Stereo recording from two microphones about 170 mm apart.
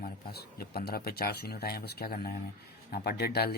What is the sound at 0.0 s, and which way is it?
Speech, 65° left (ahead or behind).